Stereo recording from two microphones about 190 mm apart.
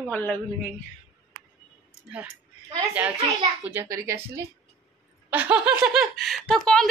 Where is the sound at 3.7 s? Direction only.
15° right (ahead or behind).